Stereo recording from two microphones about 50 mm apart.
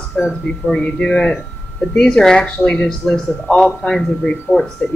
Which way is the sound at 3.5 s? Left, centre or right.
Left.